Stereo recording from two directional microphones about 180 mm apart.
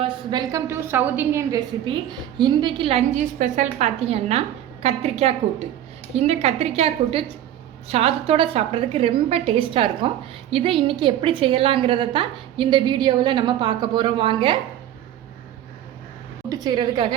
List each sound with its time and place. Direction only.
0.0 s a woman's voice: 25° right (ahead or behind)
3.2 s a woman's voice: 45° right (ahead or behind); by 14.6 s 25° right (ahead or behind)
16.5 s a woman's voice: 20° right (ahead or behind)